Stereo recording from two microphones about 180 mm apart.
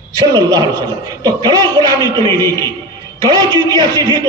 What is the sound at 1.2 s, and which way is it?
A man's voice, 20° right (ahead or behind).